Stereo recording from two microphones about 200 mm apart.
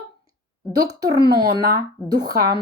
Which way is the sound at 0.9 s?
55° right (ahead or behind).